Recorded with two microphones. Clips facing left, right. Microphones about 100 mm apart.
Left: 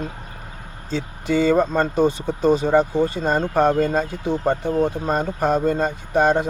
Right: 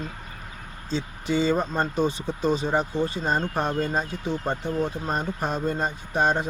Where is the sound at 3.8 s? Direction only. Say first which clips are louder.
Left 6 dB; 65° left (ahead or behind).